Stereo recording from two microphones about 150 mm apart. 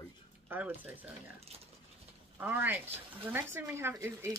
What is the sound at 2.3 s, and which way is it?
Speech, 10° right (ahead or behind).